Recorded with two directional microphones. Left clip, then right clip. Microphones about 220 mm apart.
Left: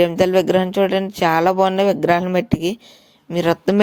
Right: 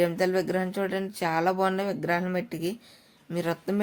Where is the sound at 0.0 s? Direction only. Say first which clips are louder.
Left 10 dB; 30° left (ahead or behind).